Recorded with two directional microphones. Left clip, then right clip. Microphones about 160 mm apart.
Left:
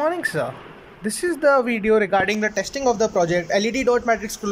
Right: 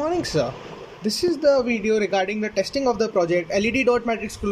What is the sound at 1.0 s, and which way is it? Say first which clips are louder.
Speech: even; 10° right (ahead or behind).